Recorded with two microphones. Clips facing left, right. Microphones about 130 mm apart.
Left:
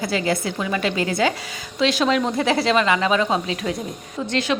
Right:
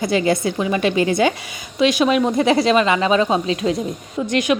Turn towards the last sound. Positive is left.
turn(degrees=-15)  # may be behind; listen again after turning